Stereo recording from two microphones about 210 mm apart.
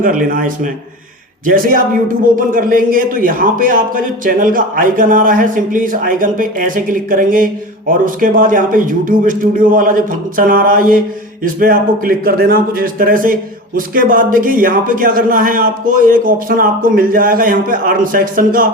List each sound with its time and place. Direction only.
0.0 s a man's voice: 40° right (ahead or behind)